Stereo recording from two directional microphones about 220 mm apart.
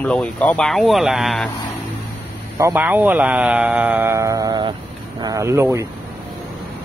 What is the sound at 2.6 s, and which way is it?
Speech, 10° right (ahead or behind).